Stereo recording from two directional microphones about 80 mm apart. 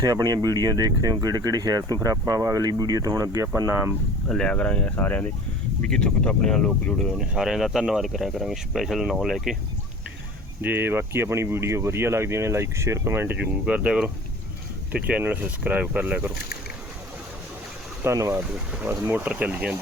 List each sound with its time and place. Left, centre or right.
0.0 s speech: right
4.3 s speech: centre
7.0 s speech: centre
10.6 s speech: right
13.7 s speech: centre
18.0 s speech: right
18.5 s speech: centre
19.0 s speech: right